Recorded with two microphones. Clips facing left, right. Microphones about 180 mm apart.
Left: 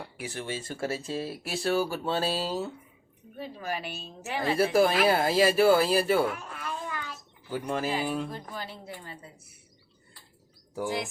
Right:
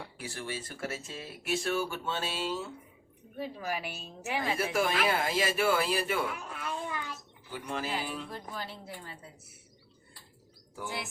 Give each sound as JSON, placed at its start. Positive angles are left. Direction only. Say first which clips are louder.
{"t": 0.2, "sound": "speech", "louder": "left 4 dB", "side_deg": 20}
{"t": 3.3, "sound": "a woman's voice", "louder": "left 1 dB", "side_deg": -10}
{"t": 4.5, "sound": "speech", "louder": "left 9 dB", "side_deg": 35}
{"t": 6.3, "sound": "a sound", "louder": "left 1 dB", "side_deg": -15}
{"t": 7.5, "sound": "speech", "louder": "left 6 dB", "side_deg": 45}
{"t": 8.3, "sound": "a woman's voice", "louder": "left 2 dB", "side_deg": 0}